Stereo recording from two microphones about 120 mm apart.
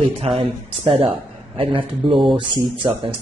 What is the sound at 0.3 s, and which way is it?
Speech, 55° right (ahead or behind).